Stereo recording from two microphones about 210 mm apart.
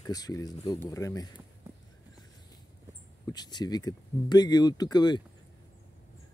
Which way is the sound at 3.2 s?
20° left (ahead or behind).